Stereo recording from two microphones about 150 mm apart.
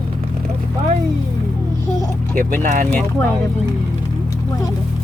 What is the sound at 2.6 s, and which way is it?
Speech, 60° right (ahead or behind).